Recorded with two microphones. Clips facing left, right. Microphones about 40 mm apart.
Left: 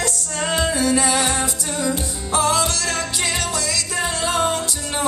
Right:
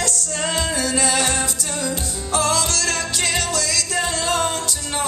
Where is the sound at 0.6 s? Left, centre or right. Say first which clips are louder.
Left 5 dB; centre.